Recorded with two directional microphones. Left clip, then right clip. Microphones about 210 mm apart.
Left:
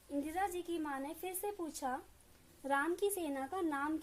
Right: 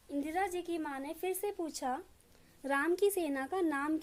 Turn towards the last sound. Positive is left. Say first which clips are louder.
# right 4 dB
turn(degrees=-35)  # may be behind; listen again after turning